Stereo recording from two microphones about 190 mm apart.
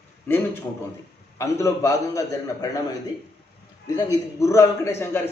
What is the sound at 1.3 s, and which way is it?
A man's voice, 15° left (ahead or behind).